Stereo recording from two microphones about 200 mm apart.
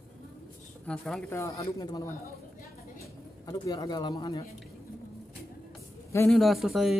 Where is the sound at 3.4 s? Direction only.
20° left (ahead or behind).